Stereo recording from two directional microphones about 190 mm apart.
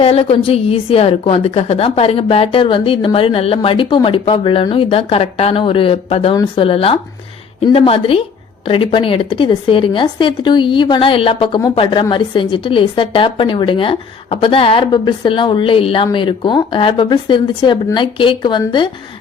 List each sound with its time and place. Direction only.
0.0 s speech: 30° left (ahead or behind)